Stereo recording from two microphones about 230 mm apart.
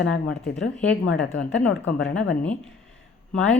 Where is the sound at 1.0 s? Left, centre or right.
Left.